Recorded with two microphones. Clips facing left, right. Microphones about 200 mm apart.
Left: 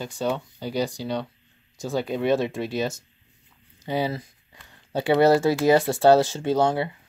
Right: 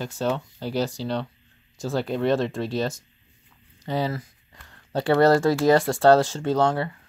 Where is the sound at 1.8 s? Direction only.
Centre (ahead or behind).